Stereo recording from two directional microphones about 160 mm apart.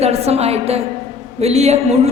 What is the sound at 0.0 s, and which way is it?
A woman's voice, 40° right (ahead or behind).